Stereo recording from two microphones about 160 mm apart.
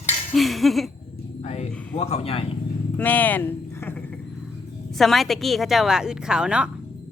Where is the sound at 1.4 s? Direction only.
45° left (ahead or behind).